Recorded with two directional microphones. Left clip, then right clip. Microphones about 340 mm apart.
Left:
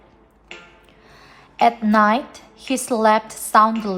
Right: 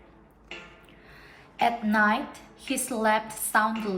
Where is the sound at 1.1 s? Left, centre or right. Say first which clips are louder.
Left 5 dB; centre.